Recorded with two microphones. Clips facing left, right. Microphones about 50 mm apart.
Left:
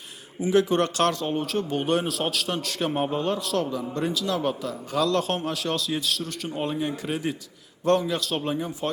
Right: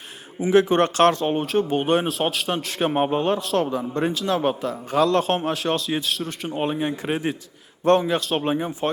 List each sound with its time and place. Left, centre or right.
0.3 s speech: right